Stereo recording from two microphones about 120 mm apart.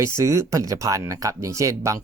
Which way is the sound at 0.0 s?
25° right (ahead or behind).